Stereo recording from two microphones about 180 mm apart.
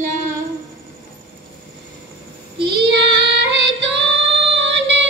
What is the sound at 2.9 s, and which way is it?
Child singing, 70° right (ahead or behind).